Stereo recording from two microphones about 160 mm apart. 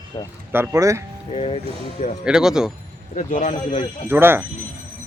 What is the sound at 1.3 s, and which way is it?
Speech, 40° left (ahead or behind).